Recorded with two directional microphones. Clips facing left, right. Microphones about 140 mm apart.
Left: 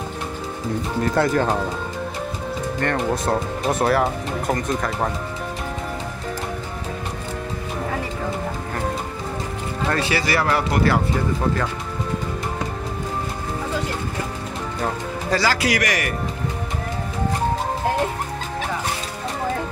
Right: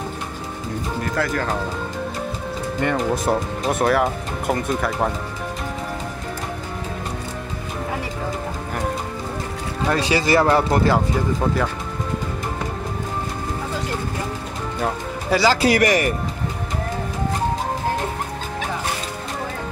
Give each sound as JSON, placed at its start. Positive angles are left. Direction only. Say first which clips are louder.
{"t": 1.1, "sound": "speech", "louder": "left 4 dB", "side_deg": 25}
{"t": 2.8, "sound": "speech", "louder": "right 2 dB", "side_deg": -5}
{"t": 9.8, "sound": "speech", "louder": "right 3 dB", "side_deg": -15}
{"t": 14.8, "sound": "music", "louder": "right 1 dB", "side_deg": -10}
{"t": 15.4, "sound": "speech", "louder": "right 7 dB", "side_deg": -30}